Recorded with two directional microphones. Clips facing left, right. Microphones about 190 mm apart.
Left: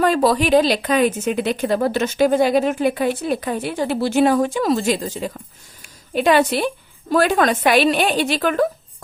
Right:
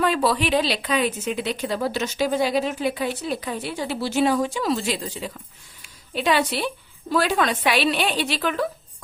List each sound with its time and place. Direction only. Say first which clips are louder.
0.0 s speech: left 5 dB; 45° left (ahead or behind)